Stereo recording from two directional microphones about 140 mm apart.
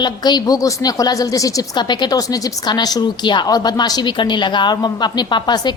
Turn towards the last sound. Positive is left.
turn(degrees=30)  # may be behind; listen again after turning